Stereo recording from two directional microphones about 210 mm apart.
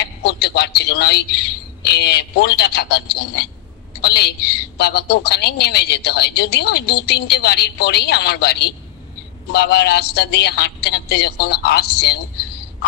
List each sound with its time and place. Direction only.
0.0 s a man's voice: 50° left (ahead or behind)